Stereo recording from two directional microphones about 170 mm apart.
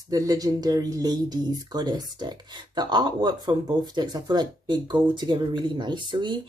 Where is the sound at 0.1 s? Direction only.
20° right (ahead or behind).